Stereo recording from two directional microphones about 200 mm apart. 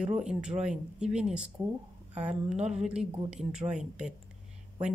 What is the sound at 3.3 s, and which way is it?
Speech, 5° right (ahead or behind).